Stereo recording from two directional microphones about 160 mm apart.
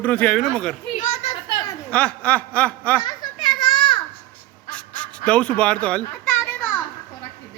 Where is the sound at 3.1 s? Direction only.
30° left (ahead or behind).